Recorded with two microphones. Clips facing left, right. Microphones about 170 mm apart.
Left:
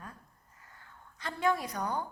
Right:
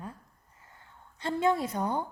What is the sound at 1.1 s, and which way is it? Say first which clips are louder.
Speech: right 4 dB; 25° right (ahead or behind).